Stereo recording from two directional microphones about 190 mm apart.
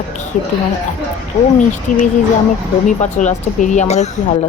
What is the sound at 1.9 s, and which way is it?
Speech, 45° left (ahead or behind).